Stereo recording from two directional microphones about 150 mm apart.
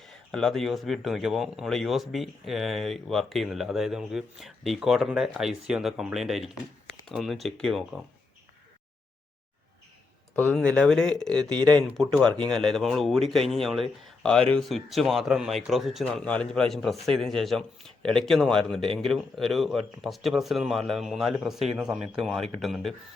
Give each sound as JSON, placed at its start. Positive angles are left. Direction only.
{"t": 0.0, "sound": "speech", "side_deg": 0}
{"t": 10.3, "sound": "speech", "side_deg": 10}
{"t": 11.5, "sound": "speech", "side_deg": -30}
{"t": 11.9, "sound": "speech", "side_deg": 5}